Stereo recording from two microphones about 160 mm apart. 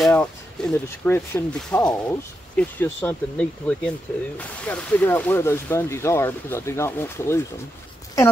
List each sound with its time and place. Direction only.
0.0 s speech: 10° left (ahead or behind)